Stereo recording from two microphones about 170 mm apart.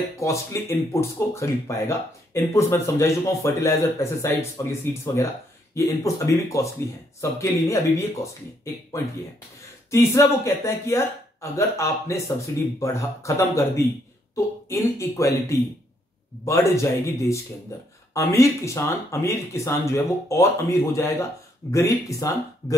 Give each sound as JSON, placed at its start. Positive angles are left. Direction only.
{"t": 0.2, "sound": "speech", "side_deg": 15}
{"t": 9.8, "sound": "speech", "side_deg": 15}